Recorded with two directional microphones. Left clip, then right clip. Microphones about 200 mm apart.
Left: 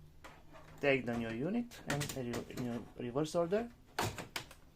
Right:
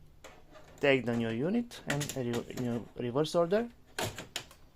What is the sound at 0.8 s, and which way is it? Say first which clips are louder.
Speech: right 5 dB; 45° right (ahead or behind).